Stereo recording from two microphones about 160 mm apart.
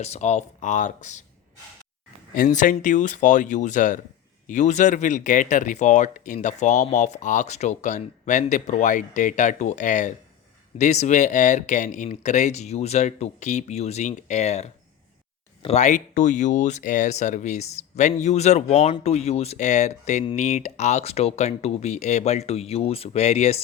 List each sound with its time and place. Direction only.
0.0 s speech: 45° left (ahead or behind)
2.3 s speech: 55° left (ahead or behind)